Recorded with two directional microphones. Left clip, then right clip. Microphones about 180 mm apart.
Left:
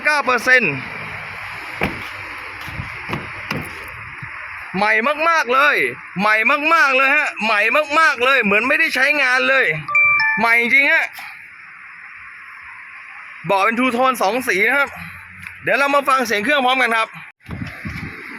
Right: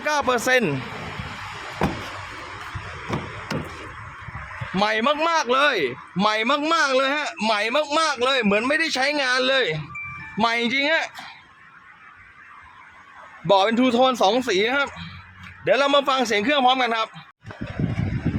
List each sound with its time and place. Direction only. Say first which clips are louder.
0.0 s speech: left 5 dB; centre (ahead or behind)
1.4 s a sound: left 3 dB; centre (ahead or behind)
4.7 s speech: left 4 dB; centre (ahead or behind)
13.5 s speech: left 2 dB; centre (ahead or behind)